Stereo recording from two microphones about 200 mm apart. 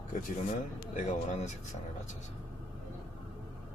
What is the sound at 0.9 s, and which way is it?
Speech, 40° left (ahead or behind).